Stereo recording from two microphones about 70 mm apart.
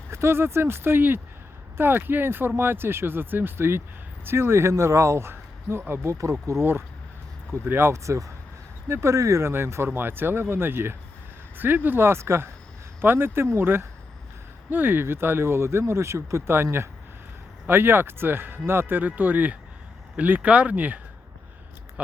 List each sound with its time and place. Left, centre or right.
0.1 s speech: right
17.7 s speech: right